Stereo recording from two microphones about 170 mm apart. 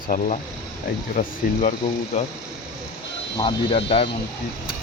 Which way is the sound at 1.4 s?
55° left (ahead or behind).